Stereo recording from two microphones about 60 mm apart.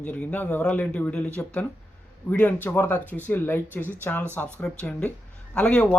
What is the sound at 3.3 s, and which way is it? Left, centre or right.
Speech, left.